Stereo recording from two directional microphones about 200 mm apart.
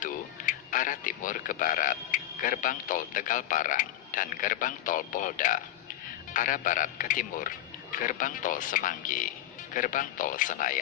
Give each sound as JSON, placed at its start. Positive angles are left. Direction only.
{"t": 0.0, "sound": "a man's voice", "side_deg": 40}